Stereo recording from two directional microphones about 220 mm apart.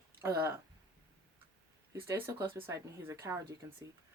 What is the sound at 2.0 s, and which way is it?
Speech, 15° right (ahead or behind).